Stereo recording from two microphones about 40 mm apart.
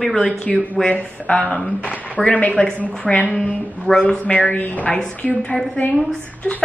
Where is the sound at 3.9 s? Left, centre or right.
Left.